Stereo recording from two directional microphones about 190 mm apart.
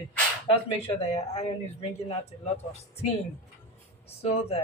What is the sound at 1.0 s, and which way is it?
Speech, 35° left (ahead or behind).